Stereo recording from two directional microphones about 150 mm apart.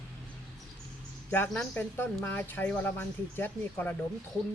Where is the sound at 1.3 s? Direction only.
10° left (ahead or behind).